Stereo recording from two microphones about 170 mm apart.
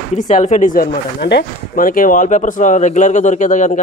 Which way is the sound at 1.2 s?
65° left (ahead or behind).